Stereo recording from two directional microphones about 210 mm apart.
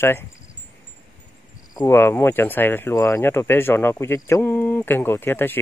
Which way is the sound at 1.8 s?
10° left (ahead or behind).